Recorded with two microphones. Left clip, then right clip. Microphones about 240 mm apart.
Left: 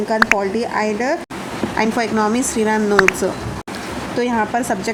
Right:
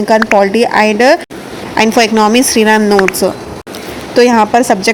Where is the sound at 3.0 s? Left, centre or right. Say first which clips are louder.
Right 3 dB; centre.